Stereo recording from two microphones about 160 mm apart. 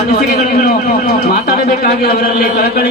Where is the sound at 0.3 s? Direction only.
70° left (ahead or behind).